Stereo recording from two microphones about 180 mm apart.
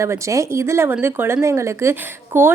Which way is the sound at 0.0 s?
15° right (ahead or behind).